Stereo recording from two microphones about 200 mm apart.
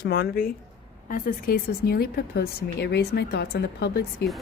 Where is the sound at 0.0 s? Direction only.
50° left (ahead or behind).